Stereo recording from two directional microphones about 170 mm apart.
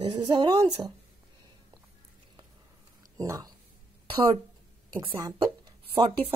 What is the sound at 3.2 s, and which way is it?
Speech, 20° right (ahead or behind).